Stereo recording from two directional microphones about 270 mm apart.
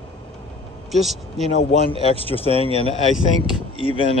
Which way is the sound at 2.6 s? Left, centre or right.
Right.